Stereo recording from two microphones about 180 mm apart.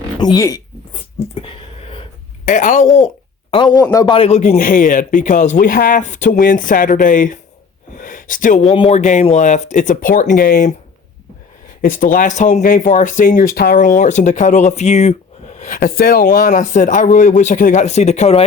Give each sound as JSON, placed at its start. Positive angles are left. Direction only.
{"t": 0.2, "sound": "speech", "side_deg": 20}
{"t": 2.4, "sound": "speech", "side_deg": 45}
{"t": 3.5, "sound": "a man's voice", "side_deg": 25}
{"t": 4.5, "sound": "speech", "side_deg": 50}
{"t": 7.9, "sound": "a sound", "side_deg": 50}
{"t": 8.7, "sound": "speech", "side_deg": 30}
{"t": 9.0, "sound": "speech", "side_deg": 40}
{"t": 11.8, "sound": "speech", "side_deg": 50}
{"t": 15.8, "sound": "speech", "side_deg": 55}